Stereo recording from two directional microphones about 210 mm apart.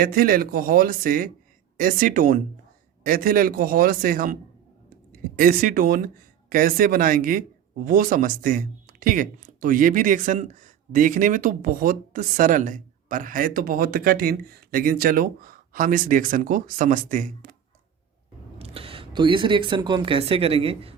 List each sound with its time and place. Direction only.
0.0 s speech: 45° right (ahead or behind)
18.6 s speech: 25° right (ahead or behind)